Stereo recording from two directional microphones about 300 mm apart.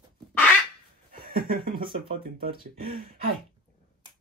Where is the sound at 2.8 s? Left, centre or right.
Right.